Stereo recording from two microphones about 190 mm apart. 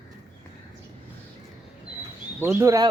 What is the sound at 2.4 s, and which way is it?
Speech, 10° right (ahead or behind).